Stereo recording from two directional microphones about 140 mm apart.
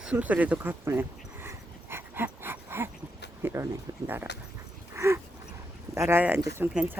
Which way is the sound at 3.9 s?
25° right (ahead or behind).